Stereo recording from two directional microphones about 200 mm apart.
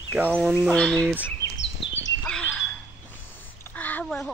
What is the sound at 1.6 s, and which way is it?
Bird vocalization, 65° left (ahead or behind).